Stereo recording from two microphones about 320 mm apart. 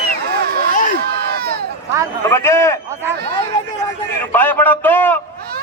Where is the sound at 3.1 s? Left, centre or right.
Right.